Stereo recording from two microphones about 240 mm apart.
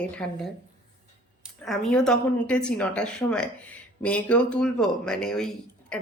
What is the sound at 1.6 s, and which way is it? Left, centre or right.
A woman's voice, centre.